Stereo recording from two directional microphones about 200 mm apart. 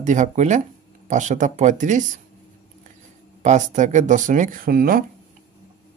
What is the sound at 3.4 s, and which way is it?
Speech, 35° right (ahead or behind).